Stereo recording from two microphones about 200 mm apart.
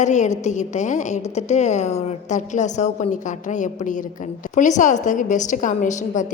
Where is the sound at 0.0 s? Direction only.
35° left (ahead or behind).